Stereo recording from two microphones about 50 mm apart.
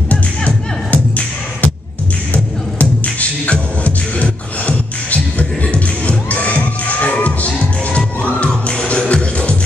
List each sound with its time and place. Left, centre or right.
0.1 s music: left
3.8 s beatboxing: left
9.1 s music: left